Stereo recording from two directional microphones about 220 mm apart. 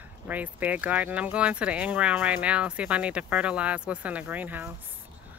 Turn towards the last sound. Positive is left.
turn(degrees=-10)  # may be behind; listen again after turning